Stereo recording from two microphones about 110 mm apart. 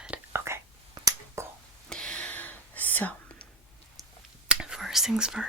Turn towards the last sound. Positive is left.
turn(degrees=-5)  # may be behind; listen again after turning